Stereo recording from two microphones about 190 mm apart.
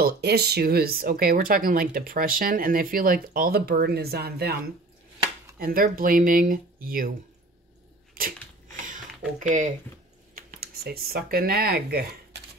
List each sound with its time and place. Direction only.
0.0 s speech: 60° right (ahead or behind)
5.6 s speech: 50° right (ahead or behind)
8.1 s a sound: 50° right (ahead or behind)
9.4 s speech: 40° right (ahead or behind)